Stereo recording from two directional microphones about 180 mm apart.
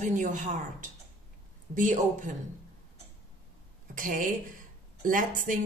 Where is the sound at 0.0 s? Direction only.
45° right (ahead or behind).